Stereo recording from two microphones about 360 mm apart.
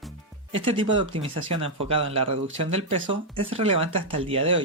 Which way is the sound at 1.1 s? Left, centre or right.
Centre.